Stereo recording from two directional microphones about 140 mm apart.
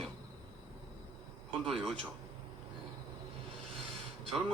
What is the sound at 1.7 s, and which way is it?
Speech, centre (ahead or behind).